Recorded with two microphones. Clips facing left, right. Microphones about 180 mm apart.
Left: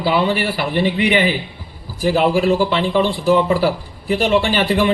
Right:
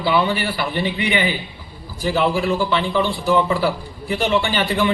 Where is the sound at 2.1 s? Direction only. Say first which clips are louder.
Left 4 dB; 40° left (ahead or behind).